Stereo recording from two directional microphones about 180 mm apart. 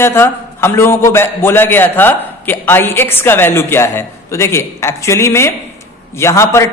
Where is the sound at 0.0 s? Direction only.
15° left (ahead or behind).